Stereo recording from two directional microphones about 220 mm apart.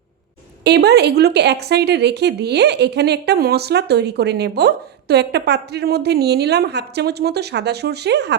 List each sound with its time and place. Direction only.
0.6 s a woman's voice: 50° right (ahead or behind)